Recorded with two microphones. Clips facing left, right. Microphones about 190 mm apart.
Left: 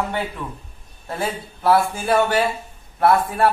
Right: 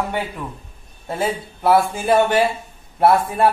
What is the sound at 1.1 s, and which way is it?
A man's voice, 20° right (ahead or behind).